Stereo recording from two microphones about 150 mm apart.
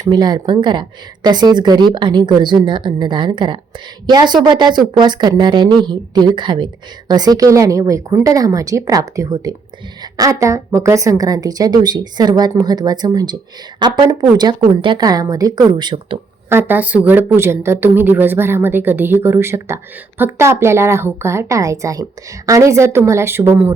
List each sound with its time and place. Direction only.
0.0 s a woman's voice: 30° right (ahead or behind)
16.5 s a woman's voice: 15° right (ahead or behind)